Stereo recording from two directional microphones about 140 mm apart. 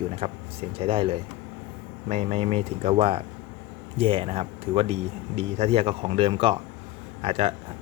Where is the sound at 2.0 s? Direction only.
50° right (ahead or behind).